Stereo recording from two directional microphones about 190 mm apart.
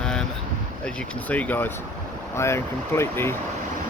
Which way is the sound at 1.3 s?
10° left (ahead or behind).